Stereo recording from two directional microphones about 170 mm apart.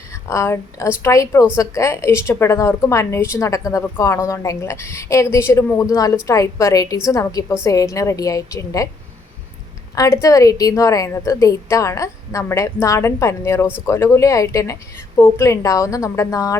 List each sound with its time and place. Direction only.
0.1 s a woman's voice: 15° left (ahead or behind)
9.9 s a woman's voice: 20° left (ahead or behind)